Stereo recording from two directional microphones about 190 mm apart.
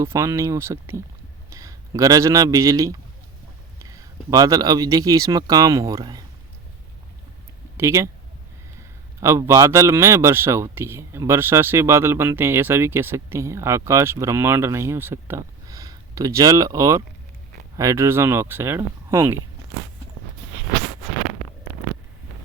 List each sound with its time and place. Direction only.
0.0 s a man's voice: 15° right (ahead or behind)
7.8 s speech: 15° right (ahead or behind)
9.2 s speech: 15° right (ahead or behind)